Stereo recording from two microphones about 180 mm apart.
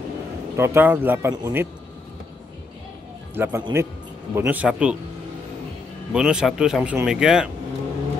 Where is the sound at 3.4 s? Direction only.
10° right (ahead or behind).